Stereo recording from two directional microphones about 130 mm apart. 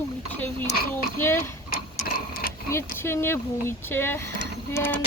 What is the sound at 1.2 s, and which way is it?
Speech, 20° left (ahead or behind).